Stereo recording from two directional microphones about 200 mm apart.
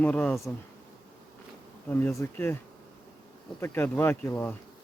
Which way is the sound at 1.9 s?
10° left (ahead or behind).